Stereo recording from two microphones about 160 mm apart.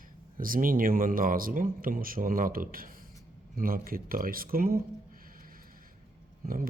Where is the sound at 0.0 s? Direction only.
60° right (ahead or behind).